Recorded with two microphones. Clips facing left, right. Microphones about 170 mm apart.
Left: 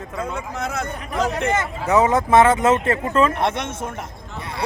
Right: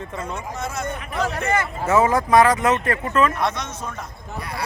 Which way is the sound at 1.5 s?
20° left (ahead or behind).